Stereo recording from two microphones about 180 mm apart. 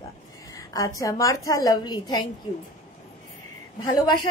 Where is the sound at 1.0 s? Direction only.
20° left (ahead or behind).